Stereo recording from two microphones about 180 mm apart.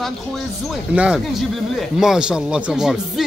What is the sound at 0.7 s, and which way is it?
Speech, 5° right (ahead or behind).